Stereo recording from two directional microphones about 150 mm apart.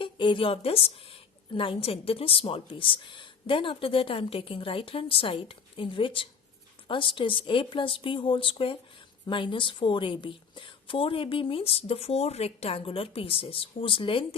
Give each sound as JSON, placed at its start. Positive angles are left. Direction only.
{"t": 0.0, "sound": "a woman's voice", "side_deg": 35}